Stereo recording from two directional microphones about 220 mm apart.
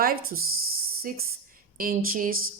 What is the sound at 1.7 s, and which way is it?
Speech, 40° right (ahead or behind).